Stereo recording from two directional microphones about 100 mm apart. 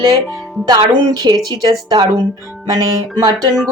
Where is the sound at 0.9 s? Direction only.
40° right (ahead or behind).